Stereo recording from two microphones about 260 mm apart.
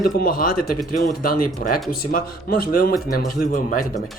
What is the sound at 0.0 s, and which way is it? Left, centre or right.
Speech, left.